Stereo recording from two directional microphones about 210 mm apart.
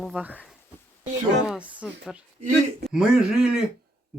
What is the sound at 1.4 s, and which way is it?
Speech, 5° right (ahead or behind).